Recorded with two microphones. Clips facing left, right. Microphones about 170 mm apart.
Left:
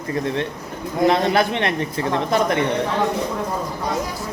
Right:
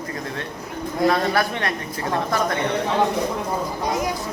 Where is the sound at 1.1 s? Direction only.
25° left (ahead or behind).